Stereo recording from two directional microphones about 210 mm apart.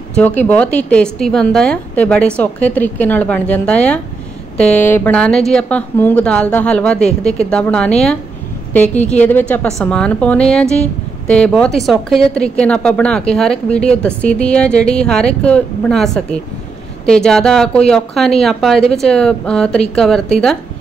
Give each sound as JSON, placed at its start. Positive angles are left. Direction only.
{"t": 0.4, "sound": "a woman's voice", "side_deg": 5}
{"t": 8.9, "sound": "a woman's voice", "side_deg": 35}
{"t": 9.2, "sound": "a woman's voice", "side_deg": 5}